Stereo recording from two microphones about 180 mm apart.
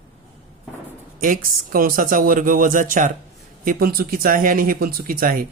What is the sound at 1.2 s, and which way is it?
Speech, 50° right (ahead or behind).